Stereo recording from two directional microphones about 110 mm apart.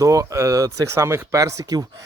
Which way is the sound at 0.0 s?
30° right (ahead or behind).